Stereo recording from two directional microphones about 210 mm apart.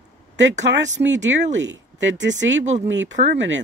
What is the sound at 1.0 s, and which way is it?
Speech, 60° right (ahead or behind).